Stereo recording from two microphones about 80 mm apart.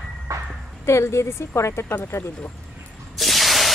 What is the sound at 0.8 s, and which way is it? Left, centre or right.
A woman's voice, left.